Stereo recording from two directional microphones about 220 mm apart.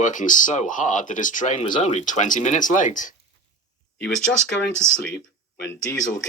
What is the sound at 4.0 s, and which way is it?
A man's voice, 5° left (ahead or behind).